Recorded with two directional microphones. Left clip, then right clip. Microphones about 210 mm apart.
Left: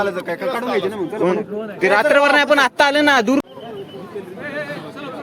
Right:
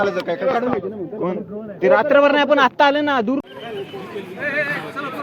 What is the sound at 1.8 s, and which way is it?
A man's voice, 10° left (ahead or behind).